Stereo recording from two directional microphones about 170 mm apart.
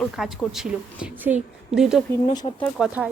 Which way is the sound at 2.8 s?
5° right (ahead or behind).